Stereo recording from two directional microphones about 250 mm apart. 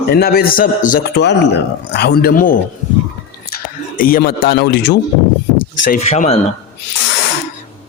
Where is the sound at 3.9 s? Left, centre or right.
Left.